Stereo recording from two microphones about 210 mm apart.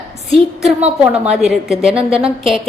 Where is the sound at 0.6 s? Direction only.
5° right (ahead or behind).